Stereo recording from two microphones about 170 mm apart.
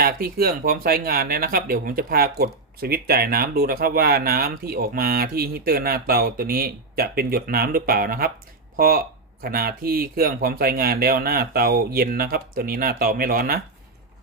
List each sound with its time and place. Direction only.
0.0 s speech: 60° right (ahead or behind)